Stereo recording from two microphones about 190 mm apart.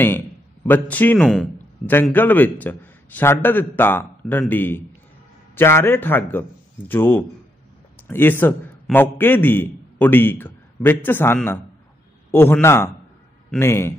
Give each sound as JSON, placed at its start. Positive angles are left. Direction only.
{"t": 0.7, "sound": "a man's voice", "side_deg": 10}